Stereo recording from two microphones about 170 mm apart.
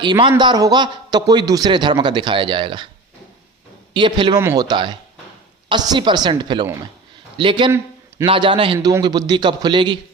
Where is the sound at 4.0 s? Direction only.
30° right (ahead or behind).